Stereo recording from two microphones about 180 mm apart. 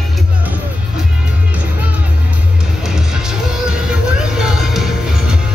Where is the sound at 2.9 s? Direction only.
5° right (ahead or behind).